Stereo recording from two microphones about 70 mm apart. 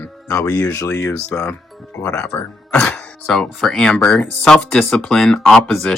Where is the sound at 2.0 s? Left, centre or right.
Centre.